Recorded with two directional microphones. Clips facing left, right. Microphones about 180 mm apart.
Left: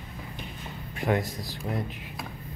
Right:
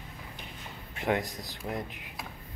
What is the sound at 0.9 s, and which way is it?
Speech, 20° right (ahead or behind).